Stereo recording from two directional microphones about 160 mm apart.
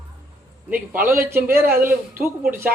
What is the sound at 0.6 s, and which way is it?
Speech, 10° right (ahead or behind).